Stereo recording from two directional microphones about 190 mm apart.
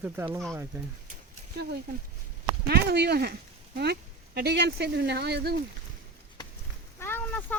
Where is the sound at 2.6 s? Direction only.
55° right (ahead or behind).